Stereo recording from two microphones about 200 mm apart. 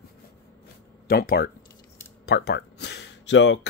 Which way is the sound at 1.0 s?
50° left (ahead or behind).